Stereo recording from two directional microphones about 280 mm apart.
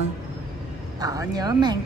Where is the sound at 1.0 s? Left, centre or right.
Centre.